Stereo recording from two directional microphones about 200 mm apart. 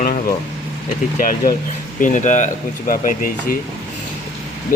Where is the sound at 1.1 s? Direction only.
45° left (ahead or behind).